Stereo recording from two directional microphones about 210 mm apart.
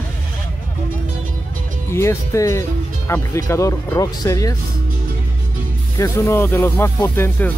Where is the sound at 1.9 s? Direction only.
15° left (ahead or behind).